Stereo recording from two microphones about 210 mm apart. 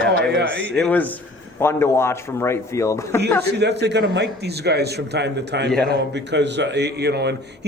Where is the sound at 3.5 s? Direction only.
55° right (ahead or behind).